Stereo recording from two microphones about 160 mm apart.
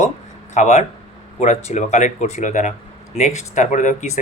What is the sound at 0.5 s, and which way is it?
Speech, 45° left (ahead or behind).